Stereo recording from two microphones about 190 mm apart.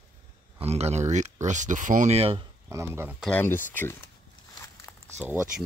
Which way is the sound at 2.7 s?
15° right (ahead or behind).